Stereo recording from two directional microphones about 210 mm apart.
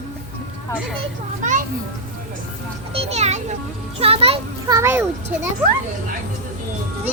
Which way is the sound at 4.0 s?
30° right (ahead or behind).